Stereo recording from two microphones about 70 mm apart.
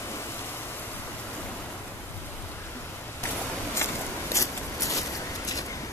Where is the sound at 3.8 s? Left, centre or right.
Left.